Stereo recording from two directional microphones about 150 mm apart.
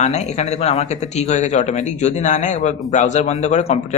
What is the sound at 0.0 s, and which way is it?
Speech, 50° left (ahead or behind).